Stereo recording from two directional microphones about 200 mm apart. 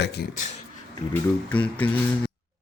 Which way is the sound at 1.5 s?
5° left (ahead or behind).